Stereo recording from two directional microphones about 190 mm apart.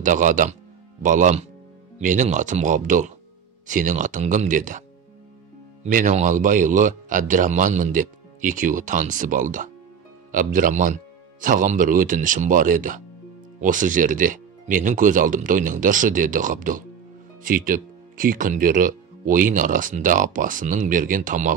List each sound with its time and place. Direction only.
0.0 s speech: 40° right (ahead or behind)
5.9 s speech: 45° right (ahead or behind)